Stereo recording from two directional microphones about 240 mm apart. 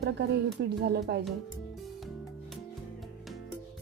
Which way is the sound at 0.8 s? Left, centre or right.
Right.